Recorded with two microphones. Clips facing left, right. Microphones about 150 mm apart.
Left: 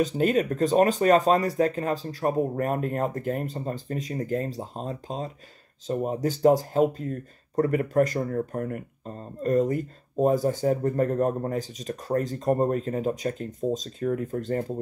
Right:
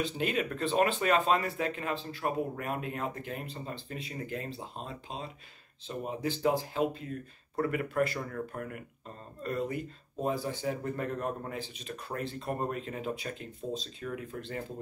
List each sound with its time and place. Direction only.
0.0 s speech: 40° left (ahead or behind)